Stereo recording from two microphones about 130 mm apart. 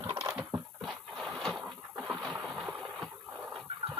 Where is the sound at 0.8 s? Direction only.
Centre (ahead or behind).